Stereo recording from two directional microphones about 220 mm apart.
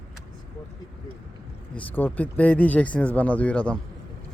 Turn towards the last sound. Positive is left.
turn(degrees=5)  # may be behind; listen again after turning